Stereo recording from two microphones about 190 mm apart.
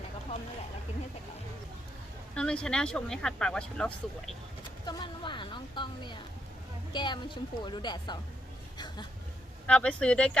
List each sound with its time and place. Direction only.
2.3 s speech: 5° left (ahead or behind)
4.9 s a woman's voice: 25° left (ahead or behind)
9.6 s speech: 5° left (ahead or behind)